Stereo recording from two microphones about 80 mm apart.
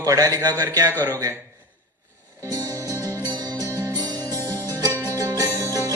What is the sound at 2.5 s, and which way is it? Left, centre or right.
Music, right.